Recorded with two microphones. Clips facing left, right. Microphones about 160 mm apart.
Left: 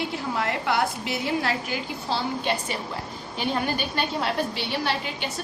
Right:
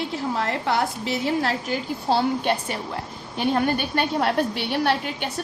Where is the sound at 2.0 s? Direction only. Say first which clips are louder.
Right 6 dB; 55° right (ahead or behind).